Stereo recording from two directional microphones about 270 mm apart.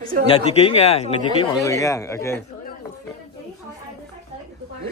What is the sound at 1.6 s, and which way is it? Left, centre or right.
Speech, centre.